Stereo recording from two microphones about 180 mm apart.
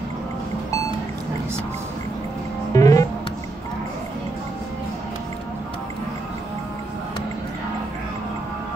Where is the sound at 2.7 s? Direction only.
20° left (ahead or behind).